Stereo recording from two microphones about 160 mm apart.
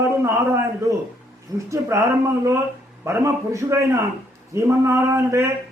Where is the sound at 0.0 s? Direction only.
15° right (ahead or behind).